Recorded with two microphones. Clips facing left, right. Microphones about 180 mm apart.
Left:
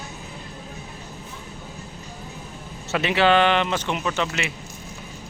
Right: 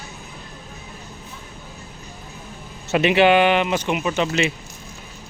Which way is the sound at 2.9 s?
20° right (ahead or behind).